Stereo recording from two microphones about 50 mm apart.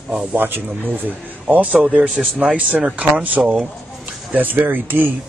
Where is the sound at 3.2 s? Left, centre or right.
Right.